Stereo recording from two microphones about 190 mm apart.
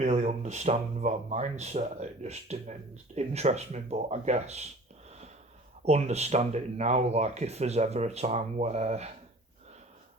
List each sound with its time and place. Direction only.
0.0 s speech: 40° right (ahead or behind)
5.8 s speech: 35° right (ahead or behind)